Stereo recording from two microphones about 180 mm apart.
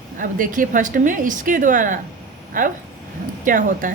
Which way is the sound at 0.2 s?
50° right (ahead or behind).